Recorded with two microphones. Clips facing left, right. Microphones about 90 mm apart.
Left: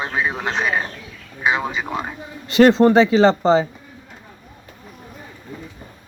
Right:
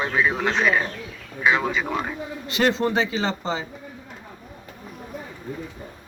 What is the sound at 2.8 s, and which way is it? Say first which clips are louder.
Speech: left 10 dB; 45° left (ahead or behind).